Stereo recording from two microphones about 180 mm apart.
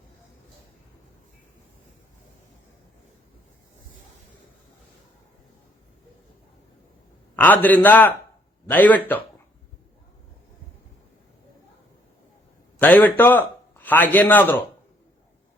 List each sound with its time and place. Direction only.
7.3 s a man's voice: 10° left (ahead or behind)
12.8 s a man's voice: 10° left (ahead or behind)